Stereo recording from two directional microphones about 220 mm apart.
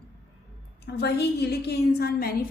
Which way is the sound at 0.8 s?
50° left (ahead or behind).